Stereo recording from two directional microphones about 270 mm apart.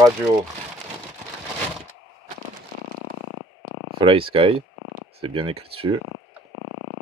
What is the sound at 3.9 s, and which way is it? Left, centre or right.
Speech, centre.